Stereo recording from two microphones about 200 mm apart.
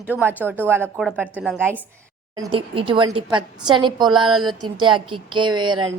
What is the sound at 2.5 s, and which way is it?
A woman's voice, 25° right (ahead or behind).